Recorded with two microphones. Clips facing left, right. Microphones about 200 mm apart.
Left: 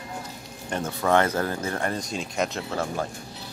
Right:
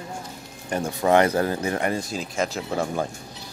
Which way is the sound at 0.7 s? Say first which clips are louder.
Right 3 dB; 15° right (ahead or behind).